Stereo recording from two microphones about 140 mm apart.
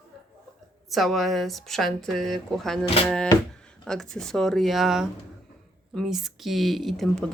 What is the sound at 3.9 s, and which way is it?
Speech, 5° left (ahead or behind).